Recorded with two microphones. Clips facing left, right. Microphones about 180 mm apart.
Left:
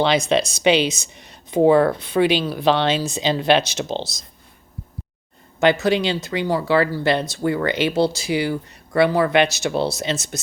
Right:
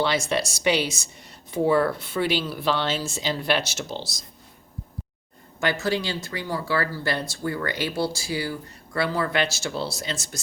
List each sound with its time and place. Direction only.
0.0 s speech: 20° left (ahead or behind)
5.5 s speech: 20° left (ahead or behind)
9.0 s speech: 70° left (ahead or behind)
9.3 s speech: 20° left (ahead or behind)